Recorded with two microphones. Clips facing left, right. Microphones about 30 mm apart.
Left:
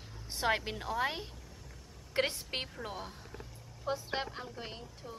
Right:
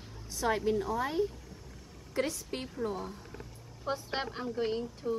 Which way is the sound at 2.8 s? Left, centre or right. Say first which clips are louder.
Right 6 dB; left.